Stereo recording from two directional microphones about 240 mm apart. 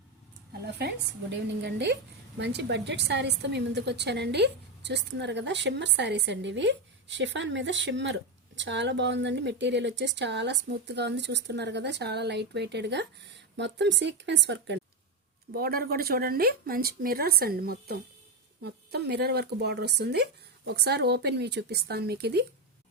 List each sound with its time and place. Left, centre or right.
0.8 s a woman's voice: right